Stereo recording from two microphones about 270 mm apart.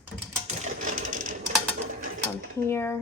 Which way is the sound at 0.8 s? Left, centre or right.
Right.